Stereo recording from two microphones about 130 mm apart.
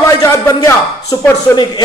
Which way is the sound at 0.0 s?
25° left (ahead or behind).